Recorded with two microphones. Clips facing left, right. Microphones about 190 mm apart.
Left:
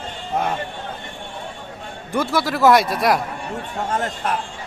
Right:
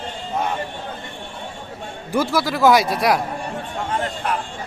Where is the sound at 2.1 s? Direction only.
Centre (ahead or behind).